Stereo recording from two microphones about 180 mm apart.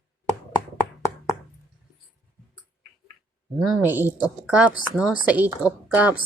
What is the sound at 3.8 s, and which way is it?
A woman's voice, 10° right (ahead or behind).